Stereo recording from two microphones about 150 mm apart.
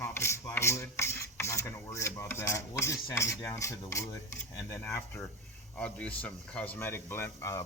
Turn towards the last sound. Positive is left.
turn(degrees=20)  # may be behind; listen again after turning